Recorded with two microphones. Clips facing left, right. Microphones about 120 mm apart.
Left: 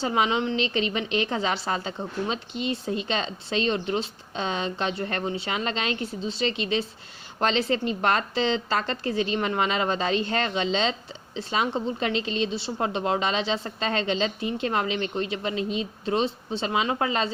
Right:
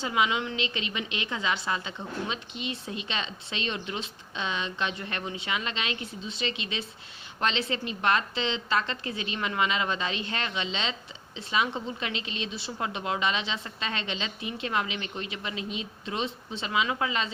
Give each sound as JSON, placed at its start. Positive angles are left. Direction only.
{"t": 0.0, "sound": "a woman's voice", "side_deg": 35}